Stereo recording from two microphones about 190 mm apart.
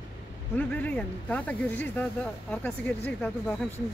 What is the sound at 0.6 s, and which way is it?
Speech, 10° left (ahead or behind).